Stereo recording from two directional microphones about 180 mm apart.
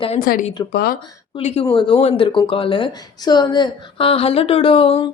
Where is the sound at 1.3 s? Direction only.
30° left (ahead or behind).